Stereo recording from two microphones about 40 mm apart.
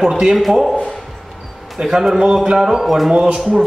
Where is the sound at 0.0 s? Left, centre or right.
Centre.